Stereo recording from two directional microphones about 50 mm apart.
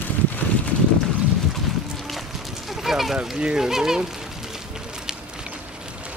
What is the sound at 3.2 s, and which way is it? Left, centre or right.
Speech, centre.